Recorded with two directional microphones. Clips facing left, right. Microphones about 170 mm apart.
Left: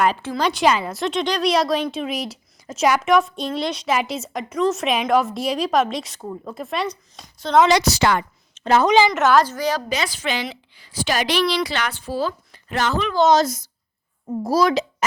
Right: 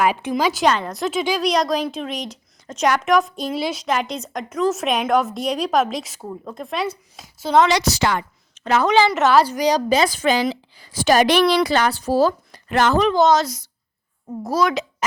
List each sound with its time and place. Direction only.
0.0 s speech: 15° right (ahead or behind)
0.4 s speech: centre (ahead or behind)
7.7 s a woman's voice: 60° left (ahead or behind)
8.5 s a sound: 25° left (ahead or behind)
8.9 s a woman's voice: 15° left (ahead or behind)
9.1 s speech: centre (ahead or behind)
9.5 s speech: 15° right (ahead or behind)
9.9 s a woman's voice: 40° right (ahead or behind)
11.8 s speech: 35° right (ahead or behind)
12.6 s a woman's voice: 55° right (ahead or behind)
13.3 s speech: 45° left (ahead or behind)
14.4 s a child's voice: 35° left (ahead or behind)